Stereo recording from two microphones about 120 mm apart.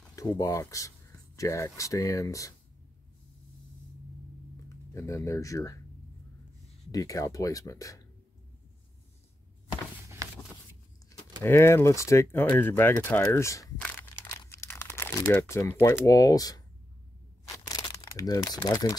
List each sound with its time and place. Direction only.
0.1 s speech: 30° left (ahead or behind)
4.9 s speech: 25° left (ahead or behind)
6.9 s speech: 30° left (ahead or behind)
10.2 s a sound: 25° right (ahead or behind)
11.4 s speech: 20° left (ahead or behind)
14.3 s crumpling: 25° left (ahead or behind)
14.7 s speech: 20° left (ahead or behind)
17.6 s crumpling: 30° left (ahead or behind)